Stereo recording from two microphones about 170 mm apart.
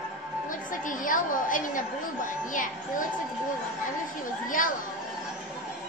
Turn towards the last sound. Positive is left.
turn(degrees=50)  # may be behind; listen again after turning